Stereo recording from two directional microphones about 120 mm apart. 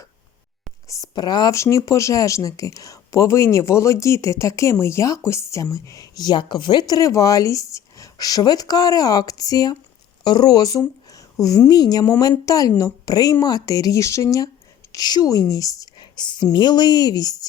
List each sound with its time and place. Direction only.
0.9 s a woman's voice: 30° left (ahead or behind)